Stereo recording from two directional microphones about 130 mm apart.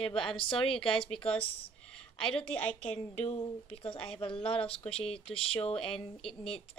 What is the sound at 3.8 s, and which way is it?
Speech, 45° left (ahead or behind).